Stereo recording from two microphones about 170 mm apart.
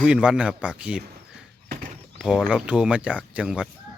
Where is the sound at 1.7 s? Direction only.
50° right (ahead or behind).